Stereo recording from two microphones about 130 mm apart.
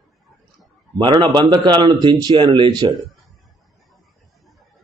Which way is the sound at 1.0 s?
35° right (ahead or behind).